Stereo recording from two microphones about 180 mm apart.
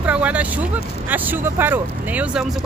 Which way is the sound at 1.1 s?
10° right (ahead or behind).